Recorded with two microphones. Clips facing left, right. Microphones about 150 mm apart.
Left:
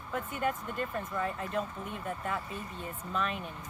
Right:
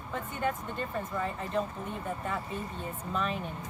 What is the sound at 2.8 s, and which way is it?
Speech, centre (ahead or behind).